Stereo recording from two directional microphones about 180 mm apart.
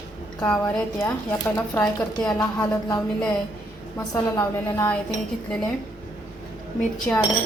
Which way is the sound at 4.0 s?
20° left (ahead or behind).